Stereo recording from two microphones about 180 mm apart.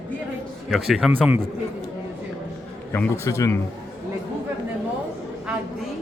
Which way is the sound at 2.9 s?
15° left (ahead or behind).